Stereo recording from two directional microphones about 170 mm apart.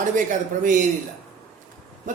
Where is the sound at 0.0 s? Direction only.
50° right (ahead or behind).